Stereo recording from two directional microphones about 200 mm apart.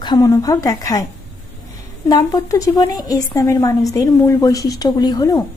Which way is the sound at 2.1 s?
15° left (ahead or behind).